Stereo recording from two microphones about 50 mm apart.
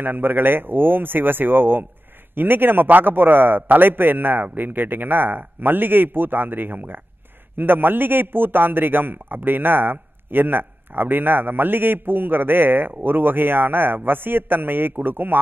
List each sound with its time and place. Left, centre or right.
0.0 s a man's voice: right